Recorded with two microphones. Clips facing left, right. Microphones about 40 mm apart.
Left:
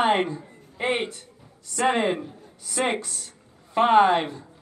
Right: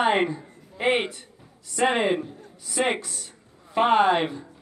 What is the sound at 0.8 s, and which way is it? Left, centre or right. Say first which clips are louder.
Speech: right 2 dB; right.